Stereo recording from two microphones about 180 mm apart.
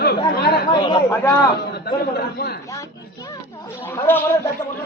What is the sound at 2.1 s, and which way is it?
Speech, 60° left (ahead or behind).